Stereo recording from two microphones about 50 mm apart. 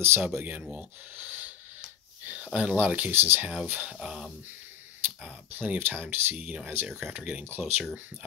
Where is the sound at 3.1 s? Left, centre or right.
Right.